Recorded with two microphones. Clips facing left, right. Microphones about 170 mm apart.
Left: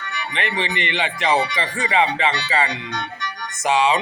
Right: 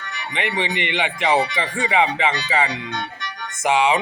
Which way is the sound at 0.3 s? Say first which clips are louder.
Right 1 dB; 15° right (ahead or behind).